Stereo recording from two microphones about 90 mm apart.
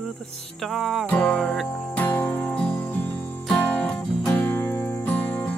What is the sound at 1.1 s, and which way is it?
Music, 10° left (ahead or behind).